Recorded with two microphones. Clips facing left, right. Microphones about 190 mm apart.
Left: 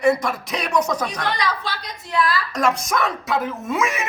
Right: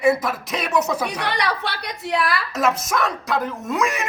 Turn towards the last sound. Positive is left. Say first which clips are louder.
# even
turn(degrees=0)  # may be behind; listen again after turning